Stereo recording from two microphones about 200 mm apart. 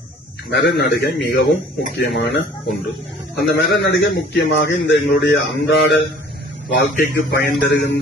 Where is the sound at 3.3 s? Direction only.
60° left (ahead or behind).